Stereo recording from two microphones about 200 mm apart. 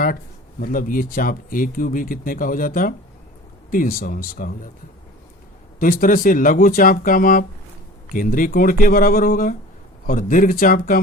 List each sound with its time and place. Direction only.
0.6 s speech: 45° left (ahead or behind)
5.8 s speech: 45° left (ahead or behind)